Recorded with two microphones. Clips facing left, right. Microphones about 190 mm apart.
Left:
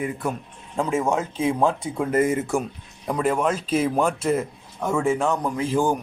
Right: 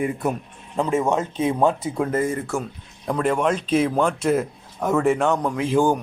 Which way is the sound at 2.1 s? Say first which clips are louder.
Left 2 dB; 15° left (ahead or behind).